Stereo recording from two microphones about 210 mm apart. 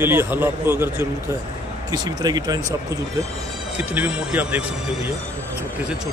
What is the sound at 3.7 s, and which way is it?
Speech, 5° right (ahead or behind).